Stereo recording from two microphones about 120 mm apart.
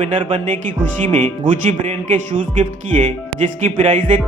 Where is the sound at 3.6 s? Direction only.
70° right (ahead or behind).